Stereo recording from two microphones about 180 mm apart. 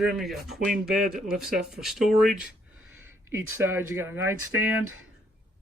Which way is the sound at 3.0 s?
15° right (ahead or behind).